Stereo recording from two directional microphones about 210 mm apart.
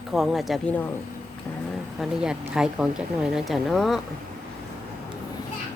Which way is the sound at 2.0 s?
5° right (ahead or behind).